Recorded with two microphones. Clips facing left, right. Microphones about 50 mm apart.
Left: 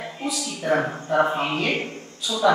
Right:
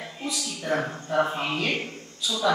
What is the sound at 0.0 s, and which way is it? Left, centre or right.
Speech, centre.